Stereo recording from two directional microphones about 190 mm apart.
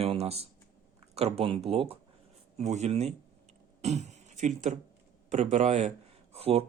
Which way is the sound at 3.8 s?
35° right (ahead or behind).